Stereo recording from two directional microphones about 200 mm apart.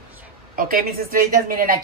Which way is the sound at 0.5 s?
45° right (ahead or behind).